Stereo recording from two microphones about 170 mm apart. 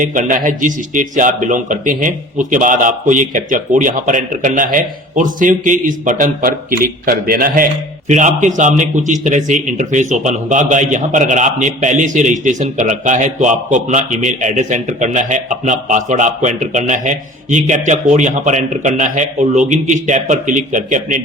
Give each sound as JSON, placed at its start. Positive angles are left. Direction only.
{"t": 0.0, "sound": "a man's voice", "side_deg": -50}